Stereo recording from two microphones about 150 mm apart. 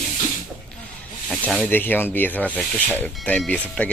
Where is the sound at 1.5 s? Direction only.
10° left (ahead or behind).